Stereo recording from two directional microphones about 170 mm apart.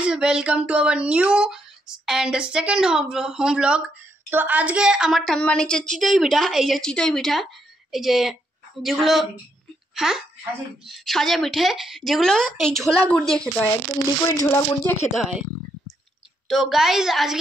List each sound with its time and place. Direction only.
0.0 s a woman's voice: 5° right (ahead or behind)
14.2 s speech: 20° left (ahead or behind)
15.1 s speech: 5° right (ahead or behind)
16.4 s speech: centre (ahead or behind)